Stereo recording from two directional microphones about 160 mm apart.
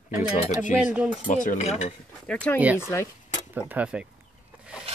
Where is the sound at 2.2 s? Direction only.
5° left (ahead or behind).